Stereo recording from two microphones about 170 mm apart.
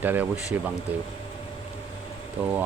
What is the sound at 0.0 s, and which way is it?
Speech, 10° right (ahead or behind).